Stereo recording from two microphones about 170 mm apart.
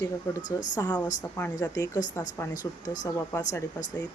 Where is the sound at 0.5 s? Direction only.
20° left (ahead or behind).